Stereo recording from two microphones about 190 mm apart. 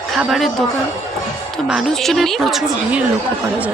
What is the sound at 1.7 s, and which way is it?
Speech, centre (ahead or behind).